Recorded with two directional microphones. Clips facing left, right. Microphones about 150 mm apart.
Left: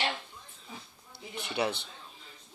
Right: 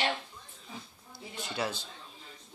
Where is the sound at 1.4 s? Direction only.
20° left (ahead or behind).